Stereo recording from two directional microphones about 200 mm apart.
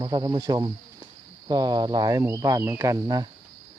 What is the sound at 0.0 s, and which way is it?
Speech, 20° right (ahead or behind).